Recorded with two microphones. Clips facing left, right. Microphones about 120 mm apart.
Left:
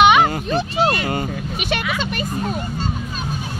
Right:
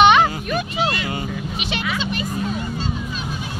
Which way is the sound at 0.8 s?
50° left (ahead or behind).